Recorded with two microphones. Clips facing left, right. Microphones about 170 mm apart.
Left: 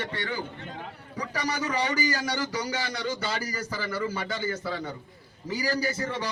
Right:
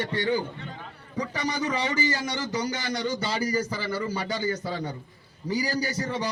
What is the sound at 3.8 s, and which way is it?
A man's voice, 30° right (ahead or behind).